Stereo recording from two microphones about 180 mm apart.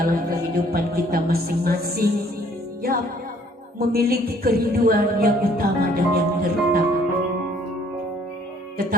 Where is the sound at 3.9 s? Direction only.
55° right (ahead or behind).